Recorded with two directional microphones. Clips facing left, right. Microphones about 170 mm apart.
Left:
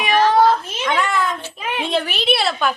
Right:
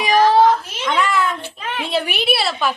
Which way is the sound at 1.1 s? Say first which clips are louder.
Right 1 dB; 10° right (ahead or behind).